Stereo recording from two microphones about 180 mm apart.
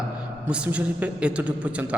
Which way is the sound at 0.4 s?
5° right (ahead or behind).